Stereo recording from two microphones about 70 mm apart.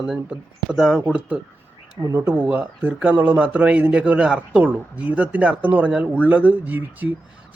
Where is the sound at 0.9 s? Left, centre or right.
Centre.